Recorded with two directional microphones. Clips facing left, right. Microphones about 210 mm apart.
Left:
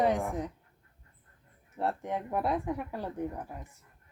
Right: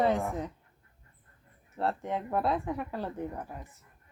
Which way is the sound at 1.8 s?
15° left (ahead or behind).